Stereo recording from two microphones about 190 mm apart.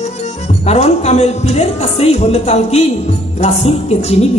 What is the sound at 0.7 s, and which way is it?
A man's voice, 35° left (ahead or behind).